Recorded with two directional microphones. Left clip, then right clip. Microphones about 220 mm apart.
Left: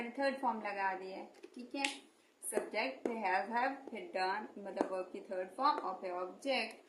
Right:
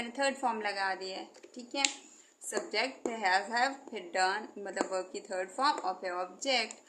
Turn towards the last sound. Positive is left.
turn(degrees=-45)  # may be behind; listen again after turning